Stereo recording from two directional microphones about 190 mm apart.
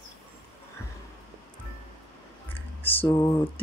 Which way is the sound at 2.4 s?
10° left (ahead or behind).